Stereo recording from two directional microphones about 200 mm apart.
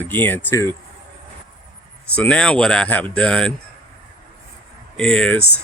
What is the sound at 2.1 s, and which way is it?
Speech, 5° left (ahead or behind).